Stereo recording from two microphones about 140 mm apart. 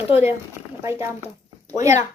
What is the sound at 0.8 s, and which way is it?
Speech, 20° right (ahead or behind).